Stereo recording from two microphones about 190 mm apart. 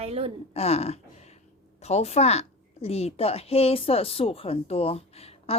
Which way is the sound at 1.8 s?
35° left (ahead or behind).